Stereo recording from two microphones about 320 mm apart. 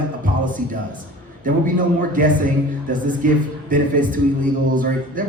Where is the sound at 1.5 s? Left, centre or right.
Right.